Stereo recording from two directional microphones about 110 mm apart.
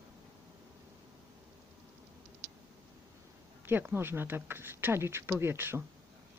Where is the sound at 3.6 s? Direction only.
20° right (ahead or behind).